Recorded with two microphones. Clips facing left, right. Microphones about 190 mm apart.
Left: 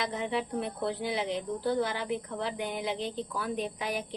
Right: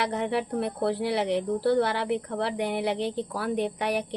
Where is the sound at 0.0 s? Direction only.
65° right (ahead or behind).